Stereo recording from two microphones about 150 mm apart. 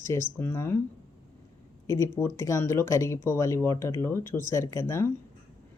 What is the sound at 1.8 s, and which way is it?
Speech, 20° left (ahead or behind).